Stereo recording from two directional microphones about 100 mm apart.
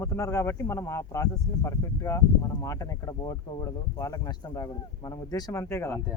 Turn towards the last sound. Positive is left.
turn(degrees=30)  # may be behind; listen again after turning